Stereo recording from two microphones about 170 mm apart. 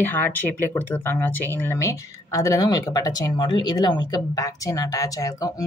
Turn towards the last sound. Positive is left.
turn(degrees=20)  # may be behind; listen again after turning